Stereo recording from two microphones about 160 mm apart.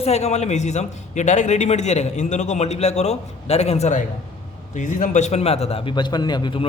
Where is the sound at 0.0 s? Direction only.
40° left (ahead or behind).